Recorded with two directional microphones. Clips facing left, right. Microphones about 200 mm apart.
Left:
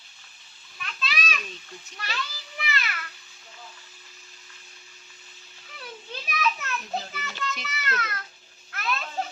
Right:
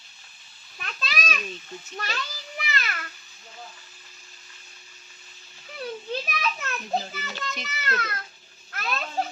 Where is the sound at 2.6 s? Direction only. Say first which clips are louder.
Even; 45° right (ahead or behind).